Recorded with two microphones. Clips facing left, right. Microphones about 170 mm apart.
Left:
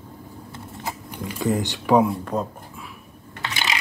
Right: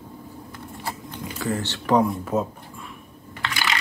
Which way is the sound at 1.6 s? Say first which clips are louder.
Left 1 dB; 10° left (ahead or behind).